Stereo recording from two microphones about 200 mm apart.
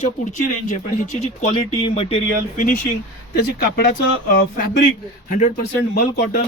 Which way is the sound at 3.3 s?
50° left (ahead or behind).